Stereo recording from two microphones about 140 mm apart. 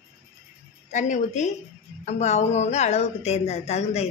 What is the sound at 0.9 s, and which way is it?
A woman's voice, 60° left (ahead or behind).